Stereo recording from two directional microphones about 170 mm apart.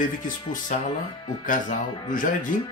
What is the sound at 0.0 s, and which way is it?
Speech, 50° left (ahead or behind).